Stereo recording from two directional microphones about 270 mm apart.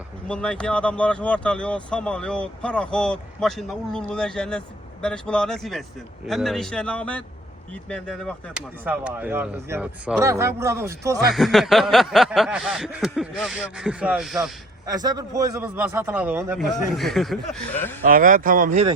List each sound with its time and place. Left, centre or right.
0.3 s speech: centre
14.8 s speech: centre
18.0 s speech: right